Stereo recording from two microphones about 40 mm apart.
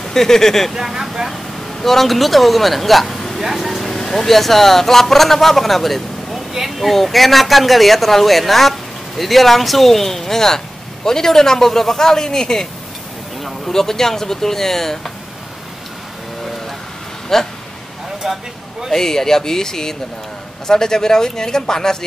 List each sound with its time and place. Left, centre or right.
0.0 s speech: centre
0.7 s speech: centre
1.3 s speech: centre
6.3 s speech: centre
17.3 s speech: centre
18.2 s a sound: centre
18.9 s speech: centre